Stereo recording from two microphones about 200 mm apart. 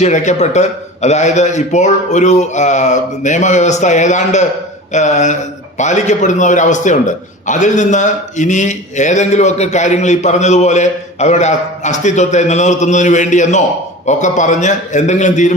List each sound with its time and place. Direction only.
0.0 s a man's voice: 35° left (ahead or behind)